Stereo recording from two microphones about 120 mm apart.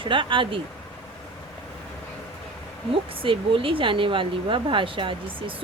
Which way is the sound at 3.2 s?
45° right (ahead or behind).